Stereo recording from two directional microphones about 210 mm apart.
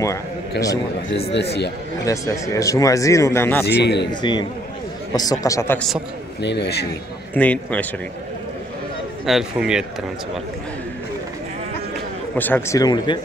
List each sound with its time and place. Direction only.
0.0 s a man's voice: 15° left (ahead or behind)
1.3 s a man's voice: 50° left (ahead or behind)
2.0 s speech: 15° left (ahead or behind)
3.6 s a man's voice: 55° left (ahead or behind)
4.1 s speech: 20° left (ahead or behind); by 6.0 s 5° left (ahead or behind)
6.4 s a man's voice: 55° left (ahead or behind)
7.3 s speech: 5° left (ahead or behind)
9.2 s speech: centre (ahead or behind)
12.4 s speech: 10° left (ahead or behind)